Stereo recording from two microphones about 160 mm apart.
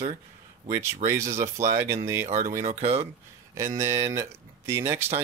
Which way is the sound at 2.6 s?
40° right (ahead or behind).